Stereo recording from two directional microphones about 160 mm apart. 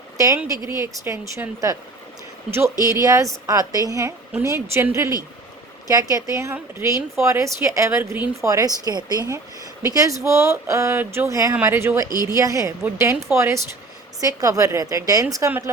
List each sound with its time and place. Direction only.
0.7 s a woman's voice: 15° right (ahead or behind)
12.0 s a woman's voice: 25° left (ahead or behind)
12.4 s a woman's voice: 20° right (ahead or behind)